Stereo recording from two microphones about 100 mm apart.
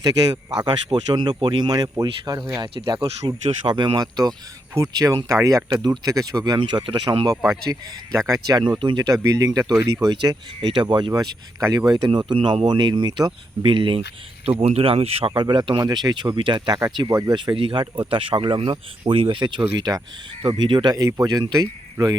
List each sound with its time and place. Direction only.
0.9 s speech: 50° right (ahead or behind)
6.6 s speech: 55° right (ahead or behind)
8.3 s speech: 35° right (ahead or behind)
10.1 s speech: 45° right (ahead or behind)
11.9 s speech: 50° right (ahead or behind)
13.7 s speech: 55° right (ahead or behind)
14.6 s speech: 85° right
15.4 s speech: 50° right (ahead or behind); by 17.3 s 35° right (ahead or behind)
17.3 s speech: 55° right (ahead or behind)
20.4 s speech: 60° right (ahead or behind); by 21.7 s 40° right (ahead or behind)